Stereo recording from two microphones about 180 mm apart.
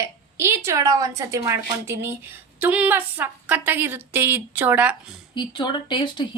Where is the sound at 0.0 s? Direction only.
15° right (ahead or behind).